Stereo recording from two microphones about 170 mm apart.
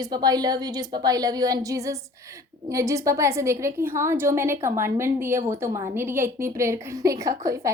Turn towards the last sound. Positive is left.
turn(degrees=-20)  # may be behind; listen again after turning